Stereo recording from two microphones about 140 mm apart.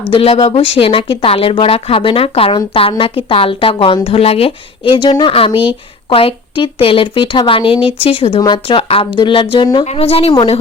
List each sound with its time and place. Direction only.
0.1 s speech: 45° left (ahead or behind)
9.8 s speech: 45° left (ahead or behind)